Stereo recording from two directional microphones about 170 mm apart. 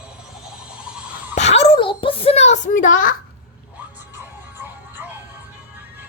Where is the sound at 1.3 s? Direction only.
40° left (ahead or behind).